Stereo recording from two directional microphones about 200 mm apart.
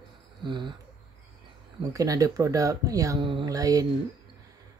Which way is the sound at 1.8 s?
15° right (ahead or behind).